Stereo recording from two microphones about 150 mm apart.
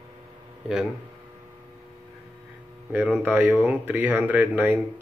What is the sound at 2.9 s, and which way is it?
Speech, 10° right (ahead or behind).